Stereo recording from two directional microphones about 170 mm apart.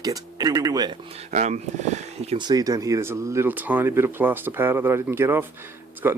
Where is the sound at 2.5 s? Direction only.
20° right (ahead or behind).